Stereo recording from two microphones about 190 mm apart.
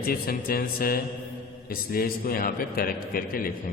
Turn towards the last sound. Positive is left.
turn(degrees=50)  # may be behind; listen again after turning